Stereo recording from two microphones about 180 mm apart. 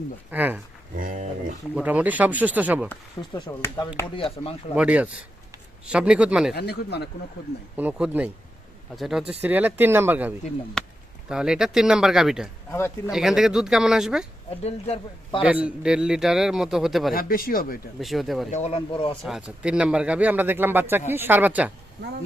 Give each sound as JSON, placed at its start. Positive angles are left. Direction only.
{"t": 0.3, "sound": "speech", "side_deg": -10}
{"t": 0.9, "sound": "a sound", "side_deg": -45}
{"t": 1.7, "sound": "speech", "side_deg": -10}
{"t": 3.2, "sound": "speech", "side_deg": 25}
{"t": 4.7, "sound": "a man's voice", "side_deg": -5}
{"t": 6.5, "sound": "speech", "side_deg": 65}
{"t": 7.8, "sound": "a man's voice", "side_deg": -5}
{"t": 10.8, "sound": "a man's voice", "side_deg": 5}
{"t": 14.6, "sound": "a man's voice", "side_deg": 35}
{"t": 15.4, "sound": "a man's voice", "side_deg": -5}
{"t": 17.2, "sound": "speech", "side_deg": 55}
{"t": 18.0, "sound": "a man's voice", "side_deg": 0}
{"t": 18.5, "sound": "a man's voice", "side_deg": 35}
{"t": 19.2, "sound": "speech", "side_deg": -5}